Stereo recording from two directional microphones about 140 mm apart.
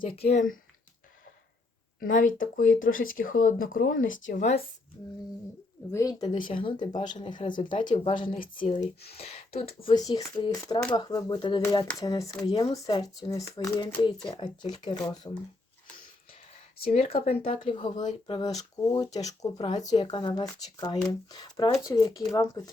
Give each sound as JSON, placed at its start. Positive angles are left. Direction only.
{"t": 0.0, "sound": "speech", "side_deg": 45}
{"t": 2.0, "sound": "speech", "side_deg": 70}
{"t": 5.9, "sound": "speech", "side_deg": 25}
{"t": 8.4, "sound": "speech", "side_deg": 70}
{"t": 10.1, "sound": "speech", "side_deg": 30}
{"t": 16.9, "sound": "speech", "side_deg": 45}